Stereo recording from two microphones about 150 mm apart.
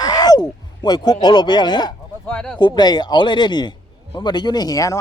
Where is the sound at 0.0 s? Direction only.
25° left (ahead or behind).